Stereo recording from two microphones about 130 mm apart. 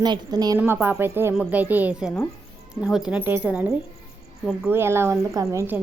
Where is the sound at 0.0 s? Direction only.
30° right (ahead or behind).